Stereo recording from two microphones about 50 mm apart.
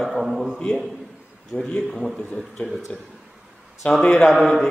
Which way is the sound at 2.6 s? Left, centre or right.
Left.